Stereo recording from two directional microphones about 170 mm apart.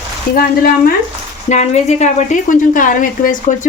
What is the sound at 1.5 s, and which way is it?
Speech, 40° left (ahead or behind).